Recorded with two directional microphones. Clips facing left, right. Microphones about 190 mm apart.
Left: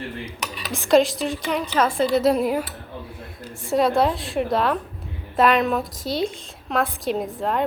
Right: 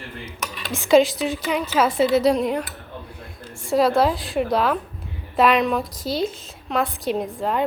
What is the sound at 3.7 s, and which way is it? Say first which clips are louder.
A woman's voice: right 1 dB; centre (ahead or behind).